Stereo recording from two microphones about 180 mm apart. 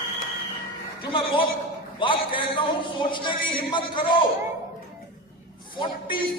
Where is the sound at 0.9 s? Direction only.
30° left (ahead or behind).